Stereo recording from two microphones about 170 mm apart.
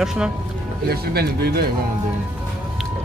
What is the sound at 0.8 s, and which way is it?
Speech, 70° right (ahead or behind).